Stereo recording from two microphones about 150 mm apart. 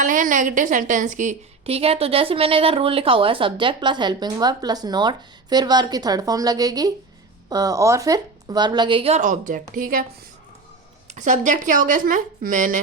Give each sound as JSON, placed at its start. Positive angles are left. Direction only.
{"t": 0.0, "sound": "a woman's voice", "side_deg": -60}
{"t": 11.1, "sound": "a woman's voice", "side_deg": -55}